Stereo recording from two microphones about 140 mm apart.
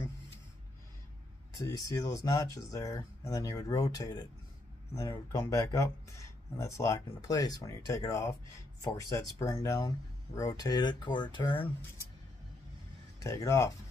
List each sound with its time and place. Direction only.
1.6 s speech: 25° left (ahead or behind)
13.2 s speech: 25° left (ahead or behind)